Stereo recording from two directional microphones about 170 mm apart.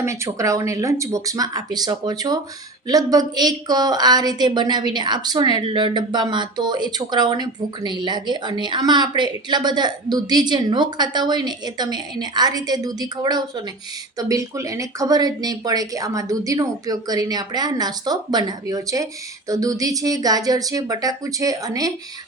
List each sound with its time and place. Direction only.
0.0 s a woman's voice: 20° right (ahead or behind)